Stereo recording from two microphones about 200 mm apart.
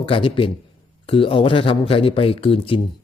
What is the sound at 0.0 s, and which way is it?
A man's voice, 25° left (ahead or behind).